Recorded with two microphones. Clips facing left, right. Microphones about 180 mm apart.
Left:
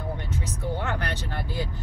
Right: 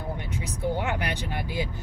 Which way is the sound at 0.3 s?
15° right (ahead or behind).